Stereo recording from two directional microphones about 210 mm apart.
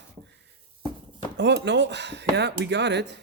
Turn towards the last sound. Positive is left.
turn(degrees=-55)  # may be behind; listen again after turning